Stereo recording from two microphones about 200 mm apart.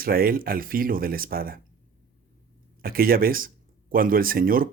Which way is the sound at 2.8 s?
45° right (ahead or behind).